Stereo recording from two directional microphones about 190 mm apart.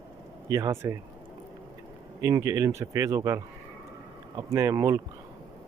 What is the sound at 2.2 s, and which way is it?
Speech, 15° right (ahead or behind).